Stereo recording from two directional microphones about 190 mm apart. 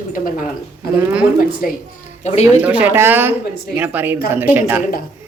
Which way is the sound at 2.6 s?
10° right (ahead or behind).